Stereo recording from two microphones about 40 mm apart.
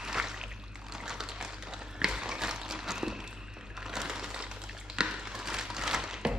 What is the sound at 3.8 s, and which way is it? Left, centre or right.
Sewing machine, centre.